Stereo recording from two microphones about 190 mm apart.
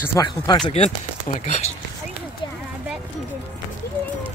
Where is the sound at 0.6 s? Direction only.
35° left (ahead or behind).